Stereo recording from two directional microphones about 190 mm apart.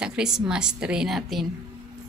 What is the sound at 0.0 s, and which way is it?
A woman's voice, 5° right (ahead or behind).